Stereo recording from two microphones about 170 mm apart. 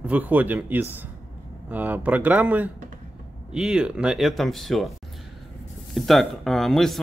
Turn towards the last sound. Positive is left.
turn(degrees=0)  # may be behind; listen again after turning